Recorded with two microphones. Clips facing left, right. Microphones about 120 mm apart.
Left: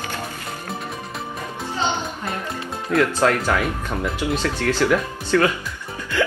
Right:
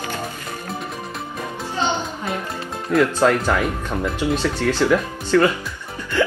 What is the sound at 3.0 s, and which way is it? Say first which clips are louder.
Speech: right 2 dB; 15° right (ahead or behind).